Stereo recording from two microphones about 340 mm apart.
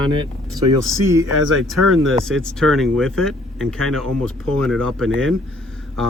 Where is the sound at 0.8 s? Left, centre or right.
Centre.